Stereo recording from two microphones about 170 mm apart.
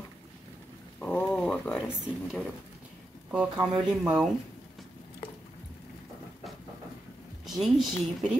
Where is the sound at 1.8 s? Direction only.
5° right (ahead or behind).